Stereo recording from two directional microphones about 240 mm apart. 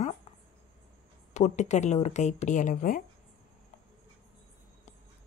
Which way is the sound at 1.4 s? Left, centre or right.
Left.